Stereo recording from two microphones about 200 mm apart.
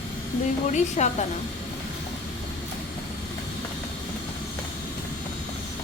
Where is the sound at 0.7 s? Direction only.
35° left (ahead or behind).